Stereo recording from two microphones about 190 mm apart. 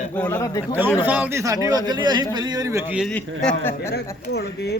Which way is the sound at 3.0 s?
5° left (ahead or behind).